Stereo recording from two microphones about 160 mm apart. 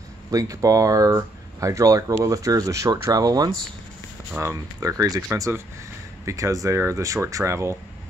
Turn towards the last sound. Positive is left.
turn(degrees=-20)  # may be behind; listen again after turning